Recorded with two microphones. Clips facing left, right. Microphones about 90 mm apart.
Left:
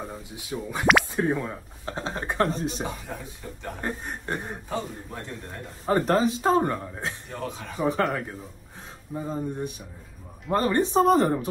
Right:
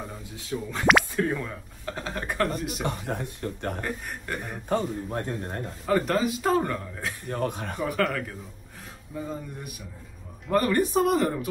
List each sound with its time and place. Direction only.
0.0 s speech: 20° left (ahead or behind)
2.8 s speech: 60° right (ahead or behind)
3.8 s speech: 30° left (ahead or behind)
4.6 s speech: 50° right (ahead or behind)
5.9 s a man's voice: 35° left (ahead or behind)
7.2 s speech: 55° right (ahead or behind)
7.8 s a man's voice: 30° left (ahead or behind)